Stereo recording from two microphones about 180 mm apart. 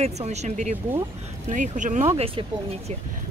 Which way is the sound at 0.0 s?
35° right (ahead or behind).